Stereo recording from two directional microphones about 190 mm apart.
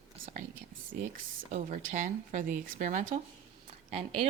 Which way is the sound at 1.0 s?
40° right (ahead or behind).